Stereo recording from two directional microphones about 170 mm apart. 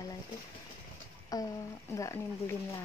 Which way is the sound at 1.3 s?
20° left (ahead or behind).